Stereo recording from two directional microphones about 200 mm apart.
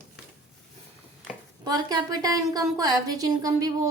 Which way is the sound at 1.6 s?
20° right (ahead or behind).